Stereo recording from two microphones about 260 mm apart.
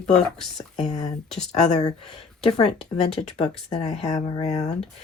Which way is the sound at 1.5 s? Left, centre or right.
Left.